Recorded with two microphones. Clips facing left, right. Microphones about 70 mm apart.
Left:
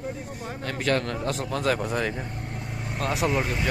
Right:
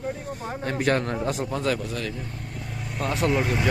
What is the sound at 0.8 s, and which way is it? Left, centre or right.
Speech, right.